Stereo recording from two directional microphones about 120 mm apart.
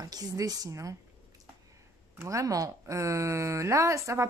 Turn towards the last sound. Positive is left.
turn(degrees=-25)  # may be behind; listen again after turning